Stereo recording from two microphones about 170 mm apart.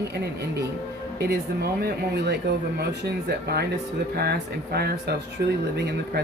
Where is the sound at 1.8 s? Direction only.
75° right (ahead or behind).